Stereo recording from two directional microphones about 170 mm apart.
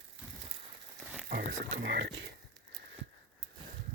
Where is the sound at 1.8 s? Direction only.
85° right.